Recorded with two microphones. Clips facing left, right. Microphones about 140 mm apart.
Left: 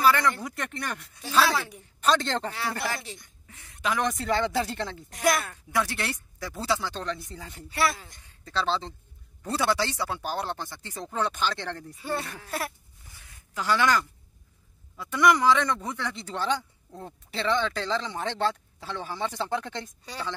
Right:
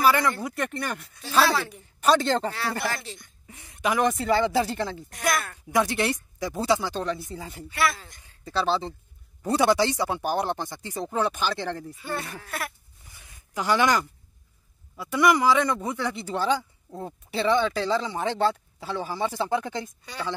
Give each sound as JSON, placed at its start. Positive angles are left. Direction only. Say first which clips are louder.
{"t": 0.0, "sound": "a man's voice", "louder": "right 1 dB", "side_deg": -10}
{"t": 2.9, "sound": "speech", "louder": "right 1 dB", "side_deg": 15}
{"t": 3.4, "sound": "speech", "louder": "right 3 dB", "side_deg": -15}
{"t": 5.1, "sound": "speech", "louder": "left 3 dB", "side_deg": 30}
{"t": 5.7, "sound": "speech", "louder": "right 6 dB", "side_deg": -15}
{"t": 7.7, "sound": "speech", "louder": "right 1 dB", "side_deg": 30}
{"t": 8.5, "sound": "speech", "louder": "right 3 dB", "side_deg": -10}
{"t": 12.4, "sound": "speech", "louder": "left 1 dB", "side_deg": 30}
{"t": 13.2, "sound": "a sound", "louder": "right 3 dB", "side_deg": -15}
{"t": 15.0, "sound": "speech", "louder": "right 1 dB", "side_deg": -10}